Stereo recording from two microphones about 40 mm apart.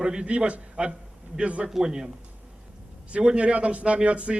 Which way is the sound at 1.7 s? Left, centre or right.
Centre.